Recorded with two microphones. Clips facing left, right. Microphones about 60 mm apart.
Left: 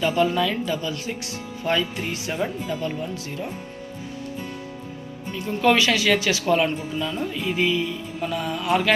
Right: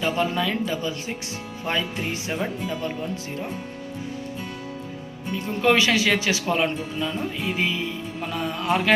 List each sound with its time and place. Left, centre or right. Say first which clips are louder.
0.0 s speech: left 3 dB; right
5.6 s speech: left 1 dB; right